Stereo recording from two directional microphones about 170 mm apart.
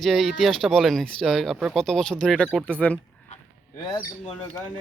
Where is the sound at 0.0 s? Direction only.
Centre (ahead or behind).